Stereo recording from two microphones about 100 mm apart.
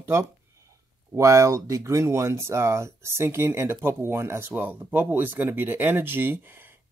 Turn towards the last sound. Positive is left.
turn(degrees=-20)  # may be behind; listen again after turning